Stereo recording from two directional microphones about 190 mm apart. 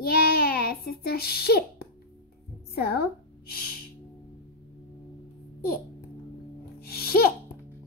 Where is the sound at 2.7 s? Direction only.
55° left (ahead or behind).